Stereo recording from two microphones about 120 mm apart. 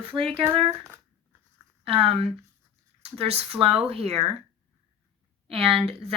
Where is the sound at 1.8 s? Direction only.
55° right (ahead or behind).